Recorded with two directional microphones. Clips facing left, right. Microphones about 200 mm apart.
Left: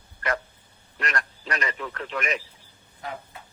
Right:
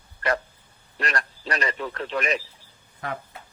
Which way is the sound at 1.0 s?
35° right (ahead or behind).